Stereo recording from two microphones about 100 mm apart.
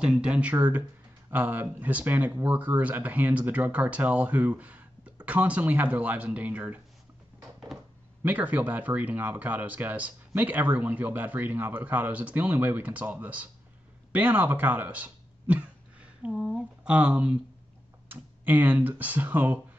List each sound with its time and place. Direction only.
0.0 s speech: 10° right (ahead or behind)
8.2 s speech: 15° right (ahead or behind)
14.1 s a sound: 15° right (ahead or behind)
16.3 s speech: centre (ahead or behind)